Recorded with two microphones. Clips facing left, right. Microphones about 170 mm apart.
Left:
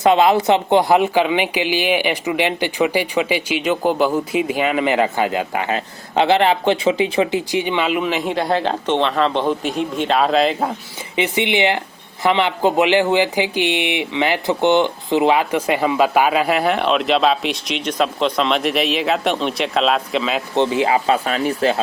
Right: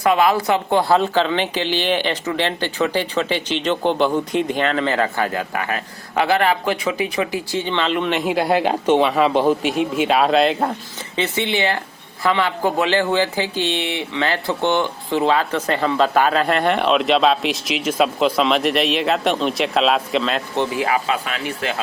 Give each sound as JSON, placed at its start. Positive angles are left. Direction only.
{"t": 0.0, "sound": "speech", "side_deg": 25}
{"t": 11.2, "sound": "speech", "side_deg": 15}
{"t": 20.6, "sound": "speech", "side_deg": 25}
{"t": 21.1, "sound": "speech", "side_deg": 35}